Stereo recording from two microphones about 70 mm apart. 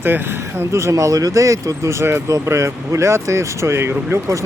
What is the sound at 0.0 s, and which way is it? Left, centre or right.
Speech, right.